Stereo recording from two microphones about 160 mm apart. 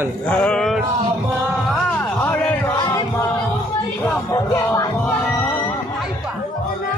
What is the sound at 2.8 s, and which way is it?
Music, 25° left (ahead or behind).